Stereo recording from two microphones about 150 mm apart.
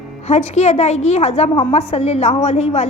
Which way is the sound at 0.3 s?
45° left (ahead or behind).